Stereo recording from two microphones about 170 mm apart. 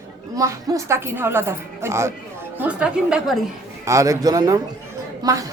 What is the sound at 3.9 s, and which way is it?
Speech, 20° right (ahead or behind).